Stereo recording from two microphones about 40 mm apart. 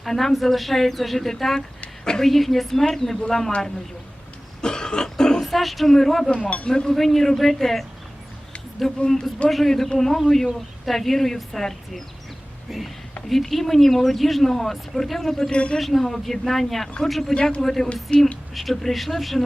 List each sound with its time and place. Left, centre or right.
0.0 s speech: centre
4.6 s cough: centre
5.4 s speech: centre
6.7 s speech: centre
6.9 s speech: centre
12.7 s speech: centre
15.4 s speech: left
15.8 s speech: centre
18.1 s speech: left
18.5 s speech: centre